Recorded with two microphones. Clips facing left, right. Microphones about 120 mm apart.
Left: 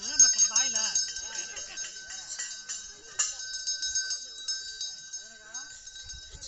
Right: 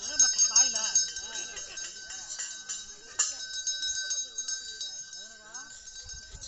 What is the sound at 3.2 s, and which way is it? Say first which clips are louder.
Bell: even; 10° right (ahead or behind).